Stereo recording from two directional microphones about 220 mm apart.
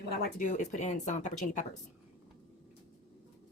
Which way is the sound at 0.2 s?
40° left (ahead or behind).